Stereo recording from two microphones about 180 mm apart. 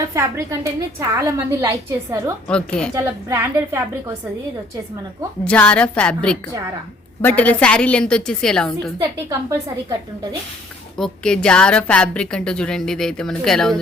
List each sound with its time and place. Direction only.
0.0 s a woman's voice: 15° right (ahead or behind)
2.5 s a woman's voice: 5° left (ahead or behind)
3.2 s a woman's voice: 15° right (ahead or behind)
5.5 s a woman's voice: 5° left (ahead or behind)
9.1 s a woman's voice: 15° right (ahead or behind)
10.9 s a woman's voice: 5° left (ahead or behind)